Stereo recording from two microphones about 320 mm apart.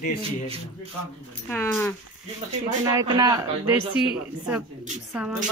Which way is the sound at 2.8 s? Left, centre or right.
Centre.